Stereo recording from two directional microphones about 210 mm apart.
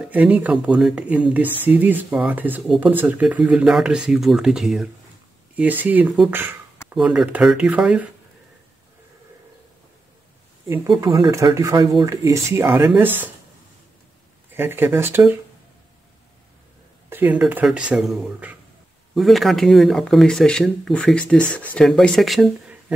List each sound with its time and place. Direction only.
0.1 s speech: 5° right (ahead or behind)
11.0 s speech: 20° right (ahead or behind)
14.5 s speech: 10° right (ahead or behind)
17.1 s speech: 10° right (ahead or behind)